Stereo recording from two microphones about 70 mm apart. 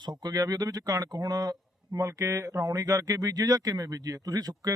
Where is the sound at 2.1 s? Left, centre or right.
Right.